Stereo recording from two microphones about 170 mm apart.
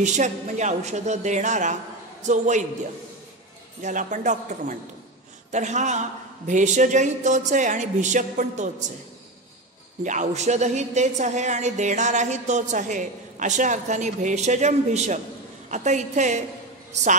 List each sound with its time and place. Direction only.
0.0 s a woman's voice: 45° right (ahead or behind)
3.8 s a woman's voice: 45° right (ahead or behind)
10.0 s a woman's voice: 45° right (ahead or behind)